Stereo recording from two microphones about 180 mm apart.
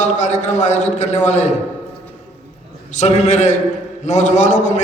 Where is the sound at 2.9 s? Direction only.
40° left (ahead or behind).